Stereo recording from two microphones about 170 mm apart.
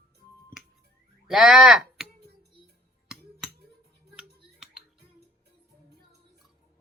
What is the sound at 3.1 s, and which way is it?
Finger snapping, centre (ahead or behind).